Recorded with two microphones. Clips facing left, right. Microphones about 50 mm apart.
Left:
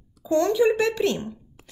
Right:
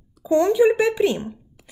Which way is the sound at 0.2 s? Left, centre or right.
Centre.